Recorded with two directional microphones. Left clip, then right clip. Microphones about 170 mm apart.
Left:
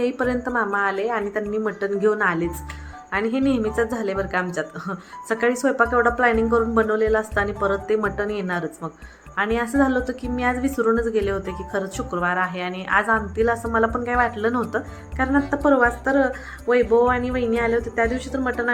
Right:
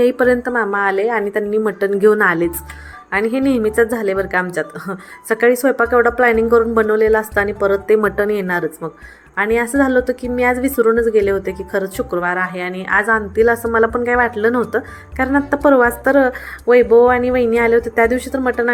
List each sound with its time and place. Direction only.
0.0 s a woman's voice: 20° right (ahead or behind)